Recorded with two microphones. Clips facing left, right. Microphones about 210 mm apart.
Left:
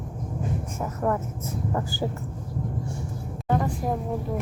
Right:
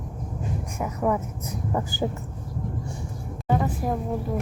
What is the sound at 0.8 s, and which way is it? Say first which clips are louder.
Speech: right 2 dB; 5° right (ahead or behind).